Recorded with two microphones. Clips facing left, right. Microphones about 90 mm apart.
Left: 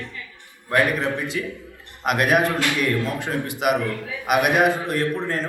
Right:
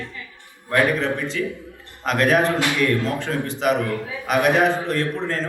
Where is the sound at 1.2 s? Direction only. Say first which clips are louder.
Right 2 dB; 15° left (ahead or behind).